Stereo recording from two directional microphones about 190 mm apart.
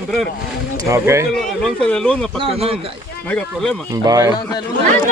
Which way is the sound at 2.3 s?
30° right (ahead or behind).